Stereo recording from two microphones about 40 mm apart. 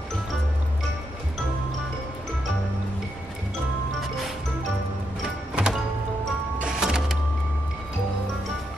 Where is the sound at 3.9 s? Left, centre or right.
Centre.